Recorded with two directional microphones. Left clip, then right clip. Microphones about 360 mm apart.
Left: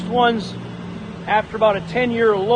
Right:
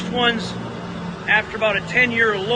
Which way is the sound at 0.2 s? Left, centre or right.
Centre.